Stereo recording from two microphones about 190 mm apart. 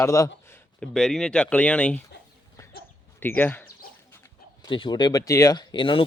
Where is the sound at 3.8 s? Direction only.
50° left (ahead or behind).